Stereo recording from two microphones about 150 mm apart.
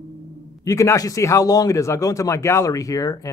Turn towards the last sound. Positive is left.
turn(degrees=25)  # may be behind; listen again after turning